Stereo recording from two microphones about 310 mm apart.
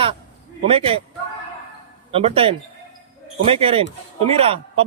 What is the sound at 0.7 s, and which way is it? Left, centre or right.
Speech, centre.